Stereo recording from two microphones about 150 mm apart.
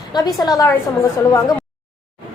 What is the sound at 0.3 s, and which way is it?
Speech, 25° left (ahead or behind).